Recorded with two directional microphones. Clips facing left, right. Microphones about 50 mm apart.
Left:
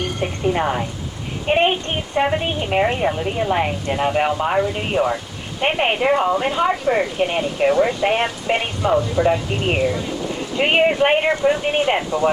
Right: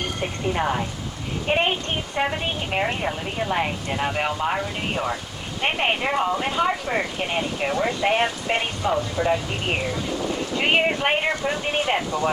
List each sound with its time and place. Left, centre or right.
1.5 s a child's voice: left